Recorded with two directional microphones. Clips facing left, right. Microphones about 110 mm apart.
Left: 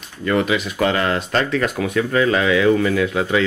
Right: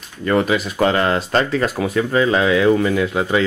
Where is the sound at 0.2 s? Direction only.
35° right (ahead or behind).